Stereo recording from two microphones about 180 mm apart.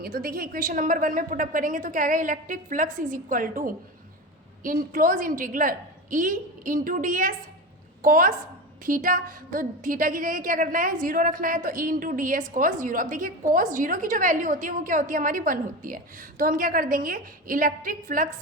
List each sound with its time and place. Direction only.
0.0 s a woman's voice: 55° right (ahead or behind)